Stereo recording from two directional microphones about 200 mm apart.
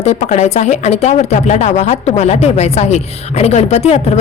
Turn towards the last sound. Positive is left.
turn(degrees=30)  # may be behind; listen again after turning